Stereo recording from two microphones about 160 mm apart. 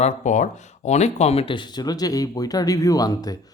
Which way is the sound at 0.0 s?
50° left (ahead or behind).